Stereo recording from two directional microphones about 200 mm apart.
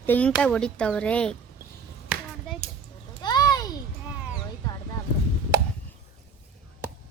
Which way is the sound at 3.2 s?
20° left (ahead or behind).